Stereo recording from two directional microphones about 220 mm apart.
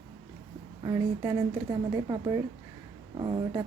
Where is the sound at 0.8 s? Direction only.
15° right (ahead or behind).